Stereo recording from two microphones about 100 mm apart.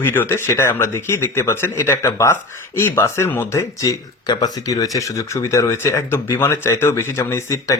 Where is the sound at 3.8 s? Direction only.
40° left (ahead or behind).